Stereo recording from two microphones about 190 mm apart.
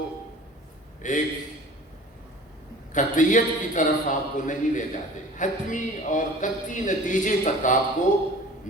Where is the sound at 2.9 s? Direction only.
40° left (ahead or behind).